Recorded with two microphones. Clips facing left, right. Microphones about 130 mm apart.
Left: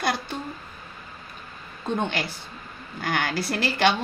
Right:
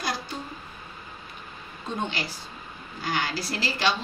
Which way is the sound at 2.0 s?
55° left (ahead or behind).